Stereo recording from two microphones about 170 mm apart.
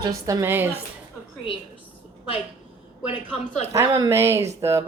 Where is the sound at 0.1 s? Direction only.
20° right (ahead or behind).